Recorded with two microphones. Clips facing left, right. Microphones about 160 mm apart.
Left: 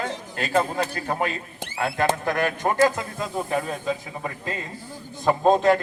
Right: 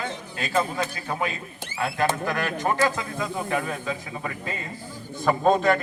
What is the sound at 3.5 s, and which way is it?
Speech, 5° left (ahead or behind).